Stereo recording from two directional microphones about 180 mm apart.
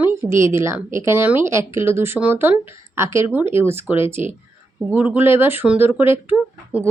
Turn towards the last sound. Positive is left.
turn(degrees=-10)  # may be behind; listen again after turning